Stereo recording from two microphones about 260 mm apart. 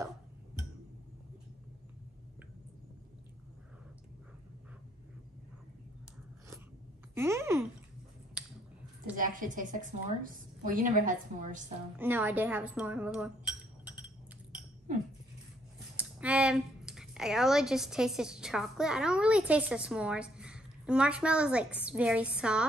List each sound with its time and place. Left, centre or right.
7.2 s speech: centre
9.1 s a woman's voice: right
12.0 s speech: centre
16.0 s a woman's voice: centre